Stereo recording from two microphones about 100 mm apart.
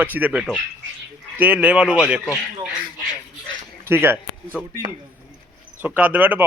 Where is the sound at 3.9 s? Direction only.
25° right (ahead or behind).